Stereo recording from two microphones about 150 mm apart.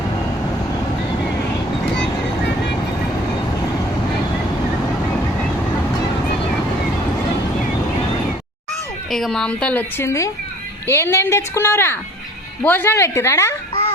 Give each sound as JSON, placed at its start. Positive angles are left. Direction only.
{"t": 9.0, "sound": "a woman's voice", "side_deg": 0}